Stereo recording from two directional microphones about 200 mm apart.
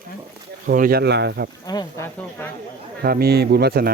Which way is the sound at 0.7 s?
45° right (ahead or behind).